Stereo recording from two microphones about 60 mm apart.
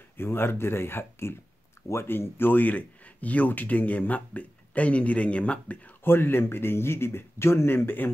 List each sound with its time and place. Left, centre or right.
0.2 s speech: left
6.0 s speech: left